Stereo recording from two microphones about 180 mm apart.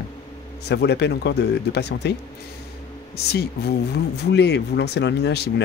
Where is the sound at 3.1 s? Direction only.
65° left (ahead or behind).